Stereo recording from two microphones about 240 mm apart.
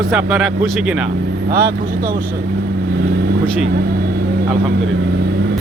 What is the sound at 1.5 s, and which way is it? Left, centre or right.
Speech, right.